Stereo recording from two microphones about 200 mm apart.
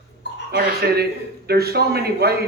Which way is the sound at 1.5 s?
50° right (ahead or behind).